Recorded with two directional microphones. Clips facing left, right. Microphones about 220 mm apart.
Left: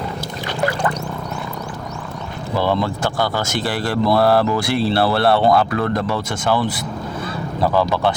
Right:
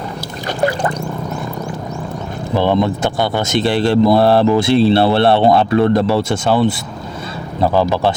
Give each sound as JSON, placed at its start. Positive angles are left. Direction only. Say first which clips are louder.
{"t": 2.6, "sound": "speech", "louder": "right 4 dB", "side_deg": -20}